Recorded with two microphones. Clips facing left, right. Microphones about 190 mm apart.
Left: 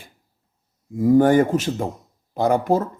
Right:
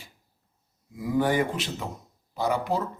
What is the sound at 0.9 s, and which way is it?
Speech, 45° left (ahead or behind).